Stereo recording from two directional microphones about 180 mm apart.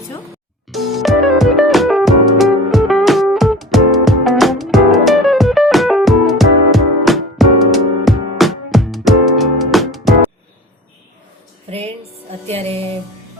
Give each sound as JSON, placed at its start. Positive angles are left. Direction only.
{"t": 0.7, "sound": "music", "side_deg": 0}
{"t": 11.7, "sound": "music", "side_deg": -35}